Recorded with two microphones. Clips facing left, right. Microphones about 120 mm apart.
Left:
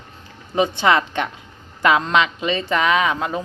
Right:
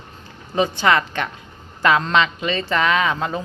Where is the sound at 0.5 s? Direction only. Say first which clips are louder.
Left 1 dB; 15° left (ahead or behind).